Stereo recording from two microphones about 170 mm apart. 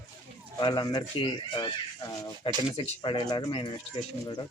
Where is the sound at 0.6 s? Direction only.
25° left (ahead or behind).